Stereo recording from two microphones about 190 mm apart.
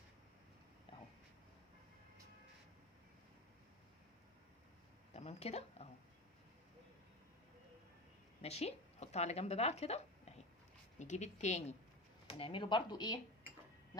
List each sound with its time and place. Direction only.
5.1 s speech: 35° left (ahead or behind)
8.4 s a woman's voice: 35° left (ahead or behind)